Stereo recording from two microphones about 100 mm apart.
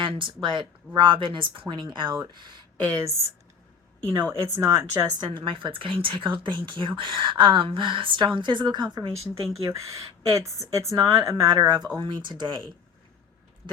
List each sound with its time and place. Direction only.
0.0 s speech: 55° right (ahead or behind)
2.9 s speech: 25° right (ahead or behind)
5.2 s speech: 60° right (ahead or behind)
9.6 s speech: 35° right (ahead or behind)
11.9 s speech: 50° right (ahead or behind)